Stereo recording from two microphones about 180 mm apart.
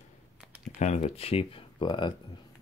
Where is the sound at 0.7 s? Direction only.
40° left (ahead or behind).